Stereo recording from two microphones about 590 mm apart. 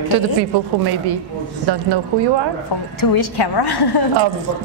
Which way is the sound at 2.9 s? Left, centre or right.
Left.